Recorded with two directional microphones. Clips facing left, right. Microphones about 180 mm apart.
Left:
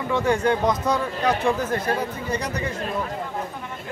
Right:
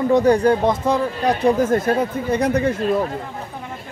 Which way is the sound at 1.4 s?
45° right (ahead or behind).